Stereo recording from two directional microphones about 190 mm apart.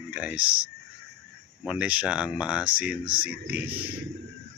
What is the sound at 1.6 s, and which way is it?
Speech, 5° right (ahead or behind).